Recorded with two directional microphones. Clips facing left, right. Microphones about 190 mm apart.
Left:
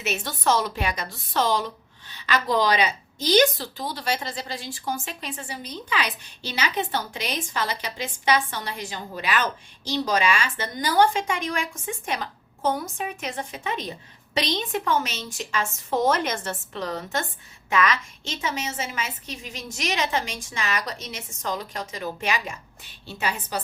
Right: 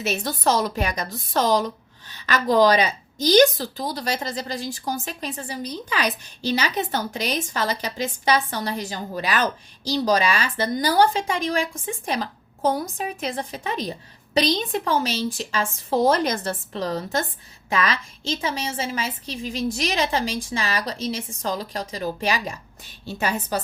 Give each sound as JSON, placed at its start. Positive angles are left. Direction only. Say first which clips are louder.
{"t": 0.0, "sound": "a woman's voice", "louder": "right 3 dB", "side_deg": -35}